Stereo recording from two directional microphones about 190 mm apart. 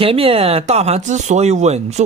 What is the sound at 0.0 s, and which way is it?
Speech, 30° right (ahead or behind).